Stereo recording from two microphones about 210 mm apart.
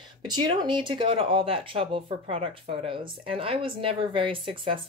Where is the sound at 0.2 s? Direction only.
20° right (ahead or behind).